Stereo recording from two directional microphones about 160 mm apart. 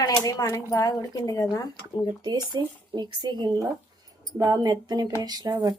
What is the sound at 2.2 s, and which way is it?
Speech, 25° right (ahead or behind).